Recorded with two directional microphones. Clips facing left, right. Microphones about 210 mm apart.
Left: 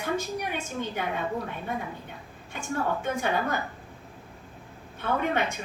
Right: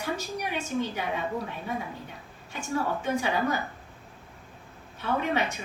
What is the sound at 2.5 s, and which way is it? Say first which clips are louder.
Speech: even; 55° left (ahead or behind).